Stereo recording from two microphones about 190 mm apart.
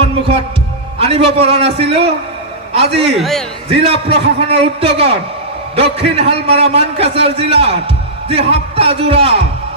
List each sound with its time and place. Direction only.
0.9 s a man's voice: 30° right (ahead or behind)
3.2 s a man's voice: centre (ahead or behind)
3.7 s a man's voice: 30° right (ahead or behind)
8.3 s music: 30° right (ahead or behind)